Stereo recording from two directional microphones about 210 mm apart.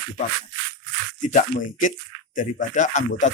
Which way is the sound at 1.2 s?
40° left (ahead or behind).